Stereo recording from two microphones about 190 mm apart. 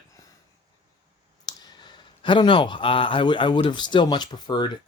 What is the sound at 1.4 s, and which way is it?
Speech, 20° left (ahead or behind).